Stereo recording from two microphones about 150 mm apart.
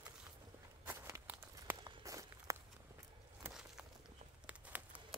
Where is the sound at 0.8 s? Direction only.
15° right (ahead or behind).